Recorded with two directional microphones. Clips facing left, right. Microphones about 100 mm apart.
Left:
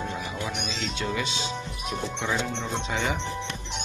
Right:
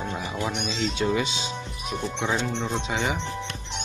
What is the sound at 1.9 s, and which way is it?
Speech, centre (ahead or behind).